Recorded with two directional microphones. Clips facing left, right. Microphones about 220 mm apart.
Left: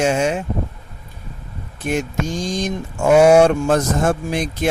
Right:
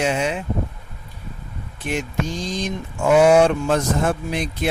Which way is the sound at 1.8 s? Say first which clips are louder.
Left 3 dB; 45° left (ahead or behind).